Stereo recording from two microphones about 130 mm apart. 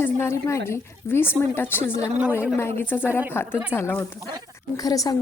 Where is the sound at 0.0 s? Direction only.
20° left (ahead or behind).